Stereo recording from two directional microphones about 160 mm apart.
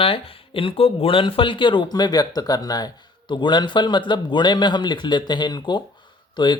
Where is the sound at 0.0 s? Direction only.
35° left (ahead or behind).